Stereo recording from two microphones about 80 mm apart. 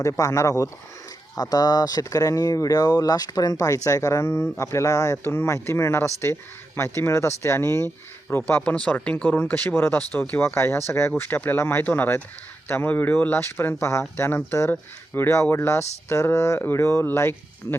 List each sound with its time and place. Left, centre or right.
0.2 s speech: left
1.4 s speech: left
5.2 s speech: left
8.6 s speech: centre; by 11.1 s left
11.2 s speech: left